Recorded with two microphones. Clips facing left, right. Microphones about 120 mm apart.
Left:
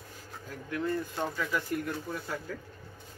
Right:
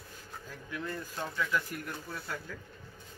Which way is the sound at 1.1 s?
20° left (ahead or behind).